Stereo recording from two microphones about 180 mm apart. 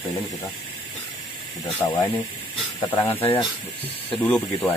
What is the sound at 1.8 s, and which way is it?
Speech, 15° left (ahead or behind).